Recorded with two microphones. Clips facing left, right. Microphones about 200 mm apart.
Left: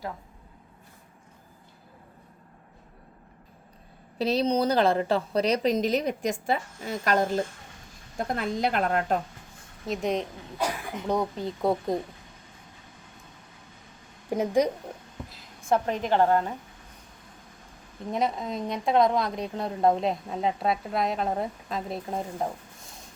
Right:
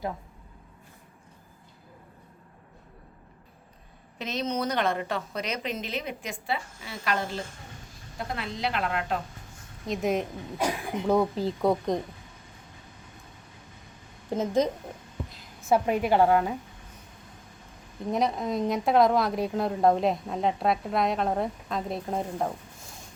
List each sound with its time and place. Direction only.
4.2 s a woman's voice: 35° left (ahead or behind)
9.8 s a woman's voice: centre (ahead or behind)
14.3 s a woman's voice: 15° left (ahead or behind)
15.3 s a woman's voice: 5° right (ahead or behind)
18.1 s a woman's voice: centre (ahead or behind)